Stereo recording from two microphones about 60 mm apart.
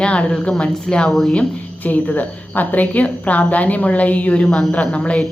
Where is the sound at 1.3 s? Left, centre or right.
Left.